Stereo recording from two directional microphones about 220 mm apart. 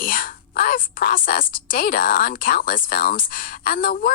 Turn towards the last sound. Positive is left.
turn(degrees=40)  # may be behind; listen again after turning